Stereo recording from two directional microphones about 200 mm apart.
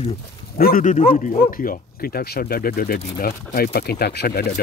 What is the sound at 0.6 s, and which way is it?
Speech, 45° left (ahead or behind).